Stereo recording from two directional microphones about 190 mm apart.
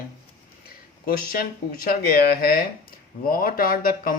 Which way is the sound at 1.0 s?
50° left (ahead or behind).